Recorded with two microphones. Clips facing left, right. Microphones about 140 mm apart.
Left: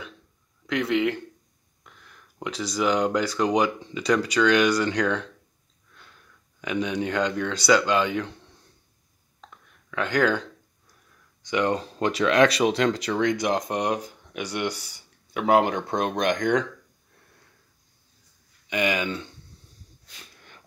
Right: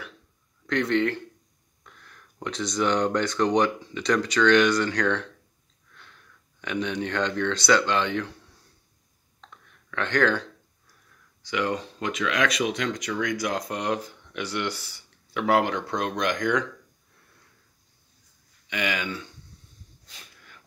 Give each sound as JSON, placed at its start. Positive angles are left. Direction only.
{"t": 0.7, "sound": "speech", "side_deg": 5}
{"t": 6.6, "sound": "speech", "side_deg": 10}
{"t": 9.4, "sound": "a sound", "side_deg": 10}
{"t": 11.4, "sound": "speech", "side_deg": 20}
{"t": 11.8, "sound": "speech", "side_deg": 35}
{"t": 18.7, "sound": "speech", "side_deg": 20}